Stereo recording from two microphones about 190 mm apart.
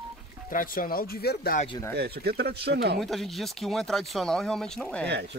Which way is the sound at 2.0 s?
55° right (ahead or behind).